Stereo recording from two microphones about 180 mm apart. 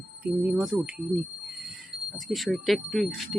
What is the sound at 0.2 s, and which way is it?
Speech, 10° right (ahead or behind).